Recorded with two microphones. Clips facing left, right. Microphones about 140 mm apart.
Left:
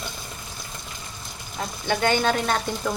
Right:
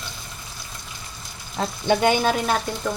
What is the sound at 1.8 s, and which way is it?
Speech, 15° right (ahead or behind).